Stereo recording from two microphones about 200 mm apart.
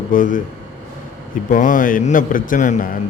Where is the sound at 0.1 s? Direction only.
40° left (ahead or behind).